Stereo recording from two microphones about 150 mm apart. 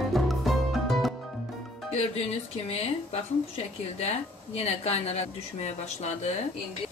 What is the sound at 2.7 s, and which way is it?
A woman's voice, 45° left (ahead or behind).